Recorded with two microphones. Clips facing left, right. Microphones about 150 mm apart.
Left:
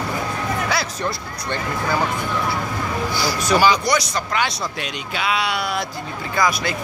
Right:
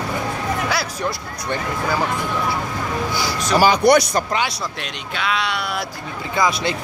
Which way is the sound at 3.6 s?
55° right (ahead or behind).